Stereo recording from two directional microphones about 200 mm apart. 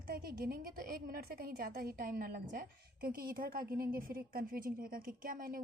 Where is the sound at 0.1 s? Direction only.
45° right (ahead or behind).